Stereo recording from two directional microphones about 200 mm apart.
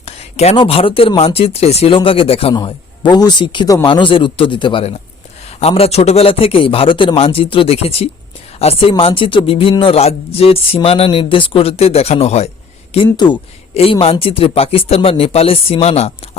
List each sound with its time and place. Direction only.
0.0 s a man's voice: 30° left (ahead or behind)